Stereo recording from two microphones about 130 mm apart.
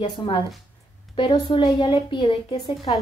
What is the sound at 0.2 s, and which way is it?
Speech, 40° left (ahead or behind).